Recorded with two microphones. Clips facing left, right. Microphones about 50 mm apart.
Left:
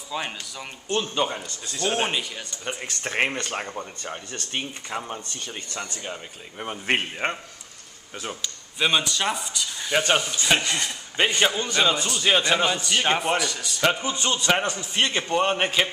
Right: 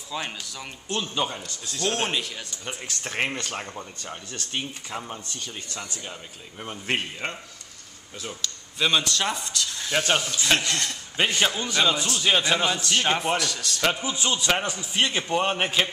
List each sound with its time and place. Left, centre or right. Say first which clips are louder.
0.1 s a man's voice: left 1 dB; centre; by 7.3 s left
8.4 s speech: even; centre
13.9 s a man's voice: left 1 dB; centre